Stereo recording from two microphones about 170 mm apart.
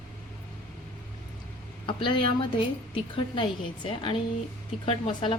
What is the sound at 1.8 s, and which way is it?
Speech, 30° left (ahead or behind).